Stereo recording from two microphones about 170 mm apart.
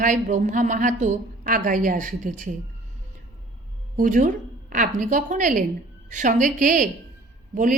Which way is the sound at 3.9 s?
50° right (ahead or behind).